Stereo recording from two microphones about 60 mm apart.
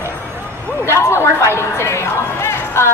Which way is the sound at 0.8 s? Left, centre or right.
Left.